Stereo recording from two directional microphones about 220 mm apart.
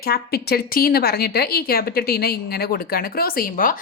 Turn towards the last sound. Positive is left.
turn(degrees=40)  # may be behind; listen again after turning